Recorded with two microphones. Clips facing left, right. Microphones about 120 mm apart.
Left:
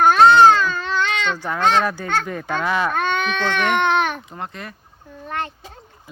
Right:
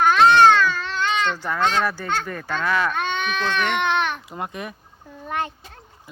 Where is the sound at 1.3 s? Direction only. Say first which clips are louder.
Left 1 dB; 15° left (ahead or behind).